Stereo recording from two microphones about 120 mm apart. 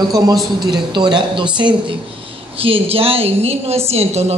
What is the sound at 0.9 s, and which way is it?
Speech, 40° right (ahead or behind).